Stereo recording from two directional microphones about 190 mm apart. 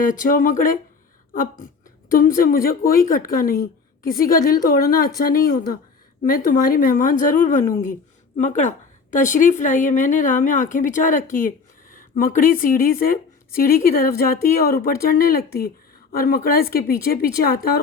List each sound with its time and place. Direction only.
0.0 s a woman's voice: 45° left (ahead or behind)